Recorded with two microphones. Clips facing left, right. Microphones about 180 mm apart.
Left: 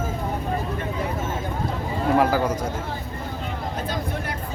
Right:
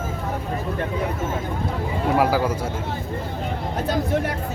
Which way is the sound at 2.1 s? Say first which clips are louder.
Even; 10° right (ahead or behind).